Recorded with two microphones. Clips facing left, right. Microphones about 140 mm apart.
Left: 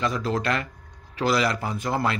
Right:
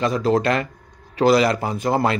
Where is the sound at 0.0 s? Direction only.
30° right (ahead or behind).